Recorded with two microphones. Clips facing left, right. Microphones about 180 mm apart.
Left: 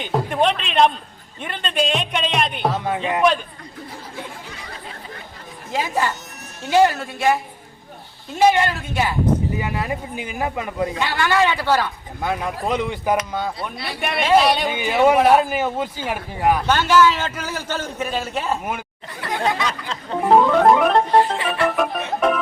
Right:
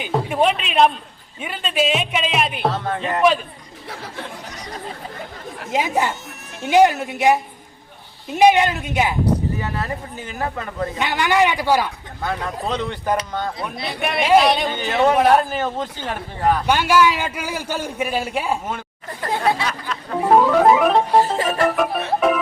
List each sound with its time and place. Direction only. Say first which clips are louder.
0.0 s a man's voice: right 1 dB; 5° right (ahead or behind)
2.7 s a man's voice: left 1 dB; 10° left (ahead or behind)
3.0 s speech: right 2 dB; centre (ahead or behind)
5.7 s a man's voice: right 2 dB; 20° right (ahead or behind)
9.6 s a man's voice: left 1 dB; 15° left (ahead or behind)
10.9 s a man's voice: right 3 dB; 20° right (ahead or behind)
12.2 s a man's voice: left 1 dB; 15° left (ahead or behind)
16.6 s a man's voice: left 1 dB; 10° right (ahead or behind)
19.2 s chatter: right 3 dB; 40° right (ahead or behind)
19.6 s a sound: even; 25° left (ahead or behind)
20.3 s speech: even; 5° right (ahead or behind)
21.3 s music: right 2 dB; 40° right (ahead or behind)